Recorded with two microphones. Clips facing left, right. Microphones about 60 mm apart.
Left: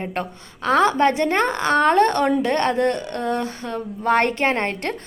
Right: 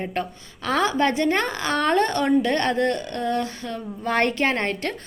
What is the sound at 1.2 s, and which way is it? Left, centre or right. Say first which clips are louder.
A woman's voice: left 3 dB; left.